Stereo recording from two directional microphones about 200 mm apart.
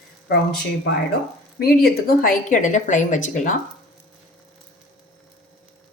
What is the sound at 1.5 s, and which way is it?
A woman's voice, 50° left (ahead or behind).